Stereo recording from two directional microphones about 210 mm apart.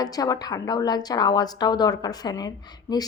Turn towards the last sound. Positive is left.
turn(degrees=20)  # may be behind; listen again after turning